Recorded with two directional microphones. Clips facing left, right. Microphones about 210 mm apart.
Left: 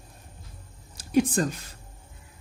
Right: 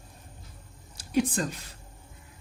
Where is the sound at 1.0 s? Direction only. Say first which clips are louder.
Left 4 dB; 45° left (ahead or behind).